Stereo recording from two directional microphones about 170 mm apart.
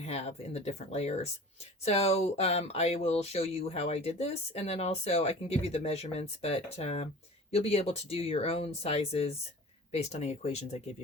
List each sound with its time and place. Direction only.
0.0 s speech: 40° left (ahead or behind)